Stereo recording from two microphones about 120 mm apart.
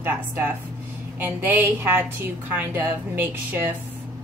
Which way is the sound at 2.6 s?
15° right (ahead or behind).